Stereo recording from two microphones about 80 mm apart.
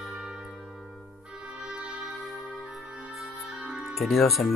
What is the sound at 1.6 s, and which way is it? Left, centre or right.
Music, centre.